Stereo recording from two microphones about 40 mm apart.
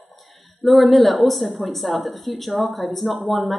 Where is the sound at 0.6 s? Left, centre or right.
Centre.